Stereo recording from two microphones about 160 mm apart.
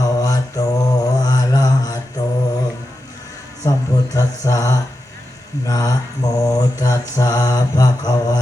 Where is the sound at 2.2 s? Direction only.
25° left (ahead or behind).